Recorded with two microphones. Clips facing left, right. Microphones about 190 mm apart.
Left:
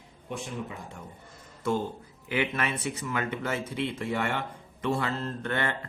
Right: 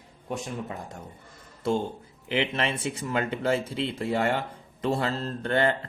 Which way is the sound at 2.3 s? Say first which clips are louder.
Right 2 dB; 25° right (ahead or behind).